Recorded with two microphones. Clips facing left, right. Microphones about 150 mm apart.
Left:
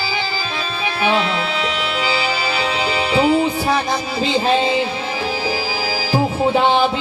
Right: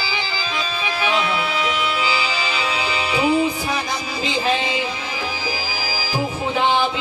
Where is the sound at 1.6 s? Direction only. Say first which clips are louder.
Left 1 dB; 30° left (ahead or behind).